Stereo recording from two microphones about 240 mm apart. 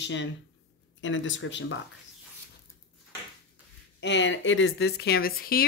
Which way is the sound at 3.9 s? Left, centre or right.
Left.